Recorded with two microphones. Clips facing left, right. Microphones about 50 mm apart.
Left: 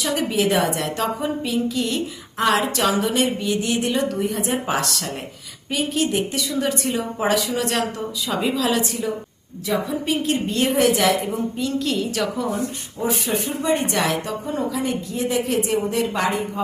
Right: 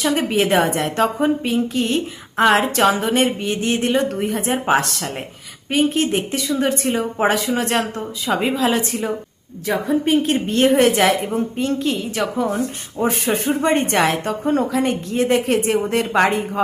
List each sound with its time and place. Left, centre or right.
0.0 s a woman's voice: right
11.8 s a woman's voice: right
13.0 s a woman's voice: right